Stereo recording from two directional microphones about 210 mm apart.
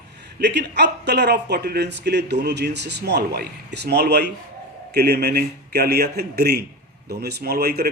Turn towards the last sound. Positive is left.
turn(degrees=-50)  # may be behind; listen again after turning